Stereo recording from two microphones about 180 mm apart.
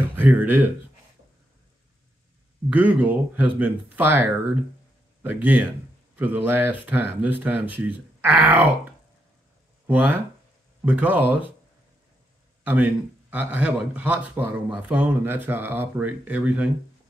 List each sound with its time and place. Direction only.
0.1 s speech: 10° right (ahead or behind)
2.7 s speech: 10° right (ahead or behind)
9.8 s speech: 10° right (ahead or behind)
12.6 s speech: 10° right (ahead or behind)